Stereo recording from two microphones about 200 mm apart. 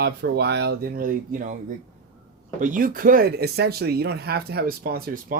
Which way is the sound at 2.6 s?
45° right (ahead or behind).